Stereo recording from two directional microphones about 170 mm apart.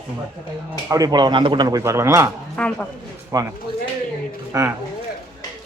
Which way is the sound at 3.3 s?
20° right (ahead or behind).